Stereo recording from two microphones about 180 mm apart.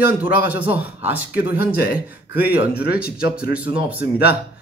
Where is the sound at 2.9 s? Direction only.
60° left (ahead or behind).